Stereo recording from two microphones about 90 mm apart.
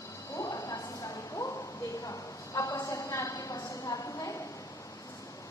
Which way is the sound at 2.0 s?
40° left (ahead or behind).